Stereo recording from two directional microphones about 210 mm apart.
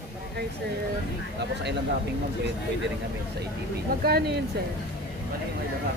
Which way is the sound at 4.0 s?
45° right (ahead or behind).